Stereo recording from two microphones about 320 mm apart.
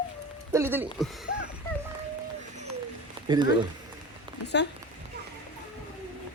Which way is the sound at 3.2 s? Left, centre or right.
Centre.